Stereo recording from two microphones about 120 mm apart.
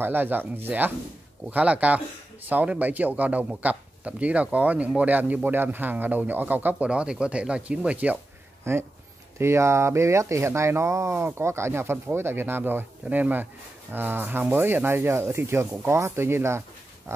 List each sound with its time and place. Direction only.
0.0 s speech: 15° right (ahead or behind)
8.6 s speech: 20° right (ahead or behind)